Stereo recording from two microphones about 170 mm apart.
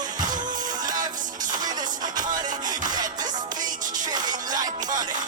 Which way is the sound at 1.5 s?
25° right (ahead or behind).